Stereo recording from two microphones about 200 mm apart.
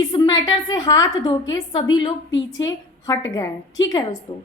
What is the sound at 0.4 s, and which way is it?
A woman's voice, 20° left (ahead or behind).